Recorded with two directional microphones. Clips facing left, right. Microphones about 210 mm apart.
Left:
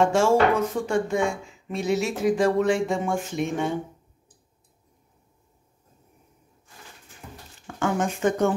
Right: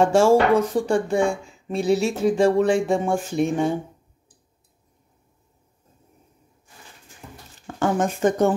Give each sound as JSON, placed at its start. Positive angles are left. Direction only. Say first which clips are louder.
{"t": 0.0, "sound": "speech", "louder": "right 3 dB", "side_deg": -35}
{"t": 7.6, "sound": "speech", "louder": "right 3 dB", "side_deg": -40}